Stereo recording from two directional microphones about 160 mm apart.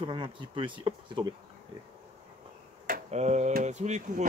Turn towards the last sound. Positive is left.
turn(degrees=-45)  # may be behind; listen again after turning